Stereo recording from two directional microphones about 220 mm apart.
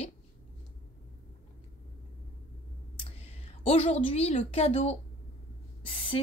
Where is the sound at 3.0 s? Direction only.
25° left (ahead or behind).